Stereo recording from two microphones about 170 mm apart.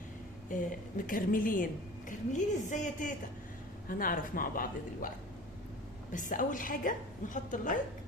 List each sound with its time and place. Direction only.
0.5 s a woman's voice: 50° left (ahead or behind)
6.1 s a woman's voice: 50° left (ahead or behind)